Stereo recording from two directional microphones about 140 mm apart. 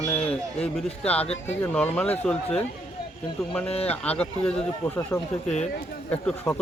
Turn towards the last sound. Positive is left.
turn(degrees=10)  # may be behind; listen again after turning